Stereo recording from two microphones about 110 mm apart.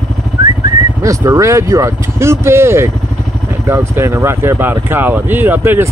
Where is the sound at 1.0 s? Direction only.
30° right (ahead or behind).